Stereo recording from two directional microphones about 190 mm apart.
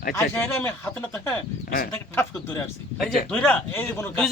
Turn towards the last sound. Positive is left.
turn(degrees=10)  # may be behind; listen again after turning